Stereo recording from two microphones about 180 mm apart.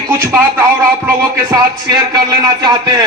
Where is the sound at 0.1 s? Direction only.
15° right (ahead or behind).